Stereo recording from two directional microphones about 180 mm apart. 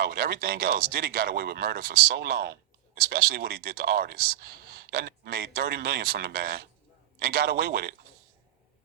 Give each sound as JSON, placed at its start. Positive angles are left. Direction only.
{"t": 0.0, "sound": "speech", "side_deg": -55}